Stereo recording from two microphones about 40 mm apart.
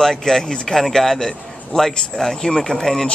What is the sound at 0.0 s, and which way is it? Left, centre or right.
Speech, centre.